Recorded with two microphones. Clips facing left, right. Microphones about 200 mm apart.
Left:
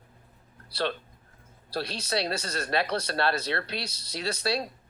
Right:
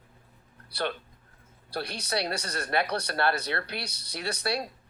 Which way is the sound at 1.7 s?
25° left (ahead or behind).